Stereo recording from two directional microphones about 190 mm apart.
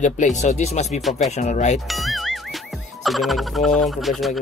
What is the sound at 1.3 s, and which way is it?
Speech, 40° left (ahead or behind).